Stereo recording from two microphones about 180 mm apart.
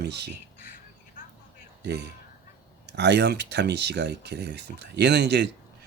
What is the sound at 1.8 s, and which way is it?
Speech, 70° right (ahead or behind).